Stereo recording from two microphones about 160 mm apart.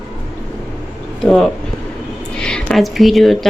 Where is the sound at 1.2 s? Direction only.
Centre (ahead or behind).